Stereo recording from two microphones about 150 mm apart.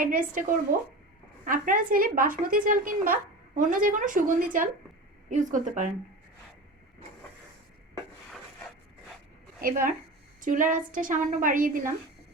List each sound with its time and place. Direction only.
0.0 s a woman's voice: 70° right (ahead or behind)
9.6 s a woman's voice: 70° right (ahead or behind)